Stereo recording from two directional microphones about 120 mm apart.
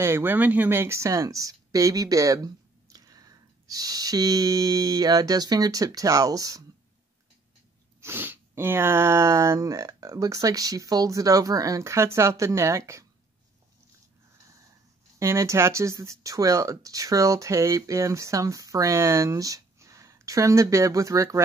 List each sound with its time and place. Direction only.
0.0 s speech: 20° right (ahead or behind)
8.0 s speech: 20° right (ahead or behind)
15.1 s speech: 25° right (ahead or behind)